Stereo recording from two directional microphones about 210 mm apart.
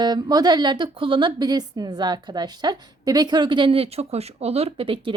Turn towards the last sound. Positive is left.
turn(degrees=-25)  # may be behind; listen again after turning